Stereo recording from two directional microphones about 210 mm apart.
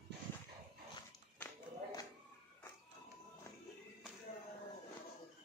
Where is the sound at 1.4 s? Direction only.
15° left (ahead or behind).